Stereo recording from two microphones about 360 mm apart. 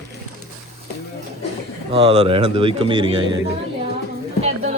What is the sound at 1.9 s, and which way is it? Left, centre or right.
A man's voice, centre.